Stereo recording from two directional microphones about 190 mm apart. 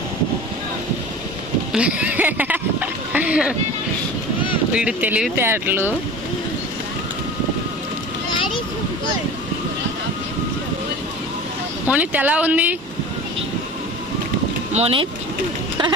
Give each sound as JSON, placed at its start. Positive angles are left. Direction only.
{"t": 1.7, "sound": "speech", "side_deg": -5}
{"t": 4.7, "sound": "speech", "side_deg": -5}
{"t": 11.9, "sound": "speech", "side_deg": -10}
{"t": 14.7, "sound": "speech", "side_deg": -30}